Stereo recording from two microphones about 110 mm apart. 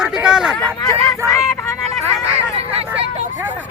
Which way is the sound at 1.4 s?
25° left (ahead or behind).